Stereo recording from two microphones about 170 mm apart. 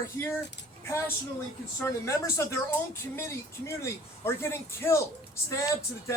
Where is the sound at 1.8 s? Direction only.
15° left (ahead or behind).